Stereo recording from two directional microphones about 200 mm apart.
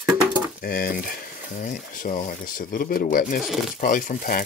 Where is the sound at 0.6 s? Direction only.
45° left (ahead or behind).